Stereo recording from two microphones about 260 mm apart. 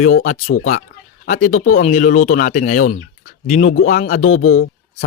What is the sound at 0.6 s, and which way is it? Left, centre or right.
Speech, left.